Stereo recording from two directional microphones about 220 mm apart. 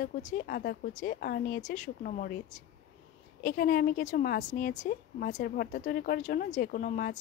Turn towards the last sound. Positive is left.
turn(degrees=40)  # may be behind; listen again after turning